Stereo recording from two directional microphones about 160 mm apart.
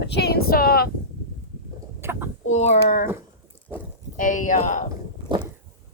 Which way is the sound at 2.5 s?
45° left (ahead or behind).